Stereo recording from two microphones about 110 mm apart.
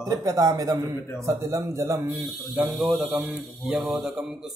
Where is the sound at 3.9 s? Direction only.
5° right (ahead or behind).